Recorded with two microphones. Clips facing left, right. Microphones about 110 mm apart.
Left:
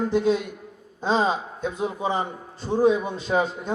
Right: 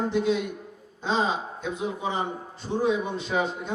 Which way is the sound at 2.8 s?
40° left (ahead or behind).